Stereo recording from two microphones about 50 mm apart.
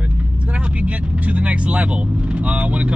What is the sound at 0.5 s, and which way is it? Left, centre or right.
Speech, right.